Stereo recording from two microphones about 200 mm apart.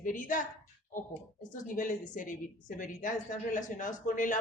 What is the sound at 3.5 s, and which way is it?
Speech, 40° left (ahead or behind).